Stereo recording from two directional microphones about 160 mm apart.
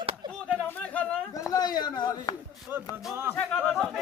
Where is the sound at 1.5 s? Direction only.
25° left (ahead or behind).